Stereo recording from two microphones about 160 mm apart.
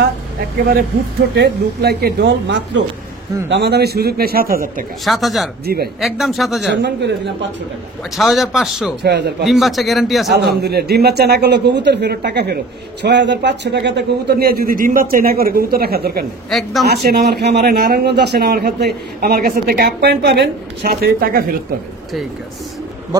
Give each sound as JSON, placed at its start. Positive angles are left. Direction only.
{"t": 1.3, "sound": "a man's voice", "side_deg": -90}
{"t": 5.0, "sound": "a man's voice", "side_deg": 0}
{"t": 6.7, "sound": "a man's voice", "side_deg": -90}
{"t": 8.2, "sound": "a man's voice", "side_deg": 0}
{"t": 9.0, "sound": "a man's voice", "side_deg": -90}
{"t": 9.5, "sound": "a man's voice", "side_deg": 0}
{"t": 10.3, "sound": "a man's voice", "side_deg": -90}
{"t": 16.4, "sound": "a man's voice", "side_deg": 0}
{"t": 16.8, "sound": "a man's voice", "side_deg": -80}